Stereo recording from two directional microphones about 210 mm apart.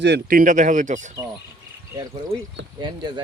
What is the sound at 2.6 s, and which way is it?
Speech, 55° right (ahead or behind).